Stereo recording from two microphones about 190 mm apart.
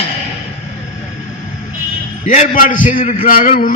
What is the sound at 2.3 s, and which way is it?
A man's voice, 40° left (ahead or behind).